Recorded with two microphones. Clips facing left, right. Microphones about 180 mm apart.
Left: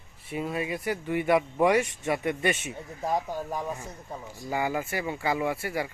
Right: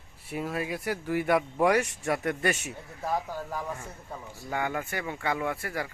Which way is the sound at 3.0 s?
15° left (ahead or behind).